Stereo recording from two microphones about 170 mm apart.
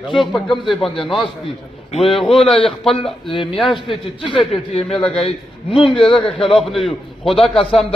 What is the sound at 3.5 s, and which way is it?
Speech, centre (ahead or behind).